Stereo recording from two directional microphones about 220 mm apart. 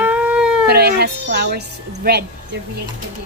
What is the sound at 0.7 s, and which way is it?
A woman's voice, 45° right (ahead or behind).